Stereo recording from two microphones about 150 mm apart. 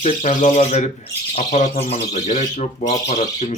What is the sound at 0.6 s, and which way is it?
Speech, 45° left (ahead or behind).